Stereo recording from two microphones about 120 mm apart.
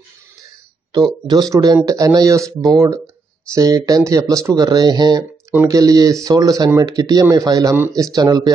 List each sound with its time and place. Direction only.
0.9 s speech: 35° right (ahead or behind)